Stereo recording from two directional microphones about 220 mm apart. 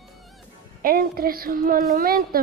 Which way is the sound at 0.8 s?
40° right (ahead or behind).